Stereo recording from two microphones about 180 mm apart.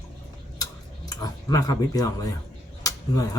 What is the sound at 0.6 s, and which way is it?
Tick-tock, 20° left (ahead or behind).